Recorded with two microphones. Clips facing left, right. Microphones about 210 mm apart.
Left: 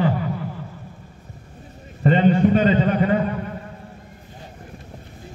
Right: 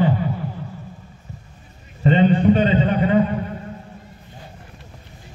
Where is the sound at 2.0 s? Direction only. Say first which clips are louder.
Right 1 dB; 45° left (ahead or behind).